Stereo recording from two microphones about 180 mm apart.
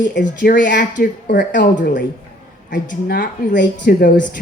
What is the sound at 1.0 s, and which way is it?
A woman's voice, 50° left (ahead or behind).